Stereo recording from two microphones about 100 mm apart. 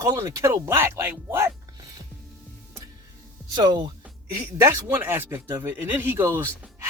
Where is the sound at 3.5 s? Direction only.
45° right (ahead or behind).